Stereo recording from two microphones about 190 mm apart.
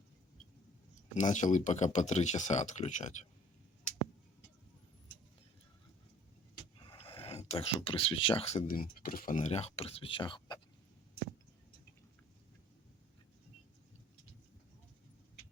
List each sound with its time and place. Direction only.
1.1 s speech: 40° left (ahead or behind)
6.8 s speech: 30° left (ahead or behind)
8.6 s speech: 45° left (ahead or behind); by 10.6 s 25° left (ahead or behind)